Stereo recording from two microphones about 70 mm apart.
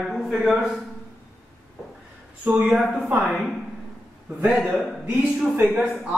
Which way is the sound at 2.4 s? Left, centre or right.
Right.